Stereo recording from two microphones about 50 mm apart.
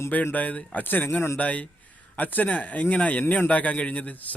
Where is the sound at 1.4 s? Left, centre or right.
Left.